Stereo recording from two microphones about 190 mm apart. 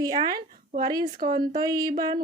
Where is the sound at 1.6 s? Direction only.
20° right (ahead or behind).